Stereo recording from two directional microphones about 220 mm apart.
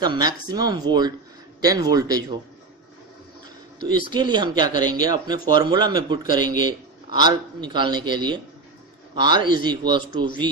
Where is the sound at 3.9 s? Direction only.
20° right (ahead or behind).